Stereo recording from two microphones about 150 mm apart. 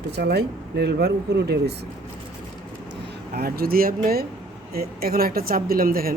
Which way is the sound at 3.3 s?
90° right.